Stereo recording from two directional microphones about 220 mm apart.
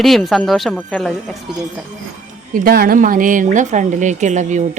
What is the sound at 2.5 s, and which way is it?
Speech, 45° right (ahead or behind).